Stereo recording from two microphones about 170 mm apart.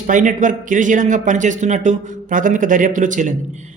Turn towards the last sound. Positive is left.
turn(degrees=-50)  # may be behind; listen again after turning